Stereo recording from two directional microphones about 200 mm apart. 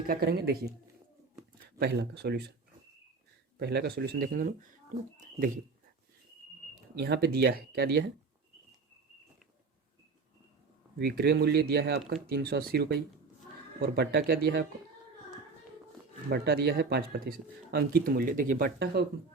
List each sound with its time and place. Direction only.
0.1 s speech: 50° right (ahead or behind)
1.8 s speech: 55° right (ahead or behind)
3.6 s speech: 55° right (ahead or behind)
7.0 s speech: 50° right (ahead or behind)
10.9 s speech: 55° right (ahead or behind)
16.3 s speech: 50° right (ahead or behind)